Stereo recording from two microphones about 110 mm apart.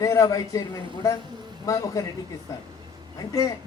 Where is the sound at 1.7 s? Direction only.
30° left (ahead or behind).